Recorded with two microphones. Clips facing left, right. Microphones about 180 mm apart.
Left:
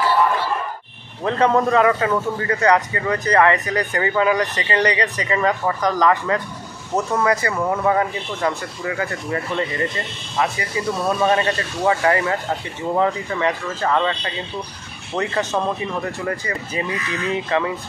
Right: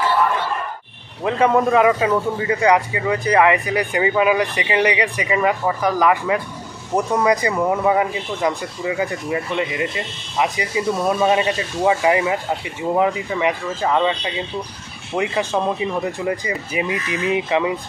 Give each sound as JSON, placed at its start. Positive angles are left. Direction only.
{"t": 1.2, "sound": "a man's voice", "side_deg": -10}